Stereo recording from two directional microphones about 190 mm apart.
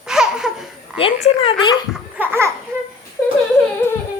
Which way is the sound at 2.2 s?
15° right (ahead or behind).